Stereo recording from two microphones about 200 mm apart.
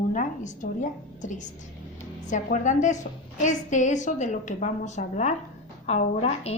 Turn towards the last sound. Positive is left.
turn(degrees=30)  # may be behind; listen again after turning